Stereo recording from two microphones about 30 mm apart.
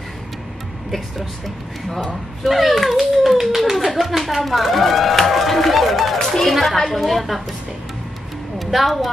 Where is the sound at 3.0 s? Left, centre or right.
Centre.